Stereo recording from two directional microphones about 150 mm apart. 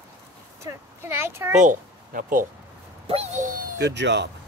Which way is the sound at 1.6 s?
65° right (ahead or behind).